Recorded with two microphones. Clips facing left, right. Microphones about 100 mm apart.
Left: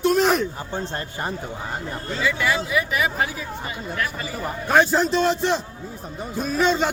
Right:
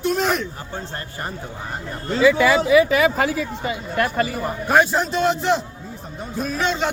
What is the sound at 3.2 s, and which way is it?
Speech, 90° right.